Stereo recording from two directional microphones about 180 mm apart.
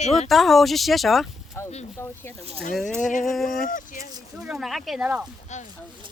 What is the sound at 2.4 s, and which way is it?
Speech, 35° right (ahead or behind).